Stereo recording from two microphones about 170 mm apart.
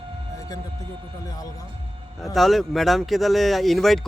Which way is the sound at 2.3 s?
Centre (ahead or behind).